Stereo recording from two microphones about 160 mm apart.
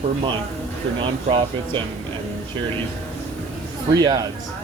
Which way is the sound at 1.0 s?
30° right (ahead or behind).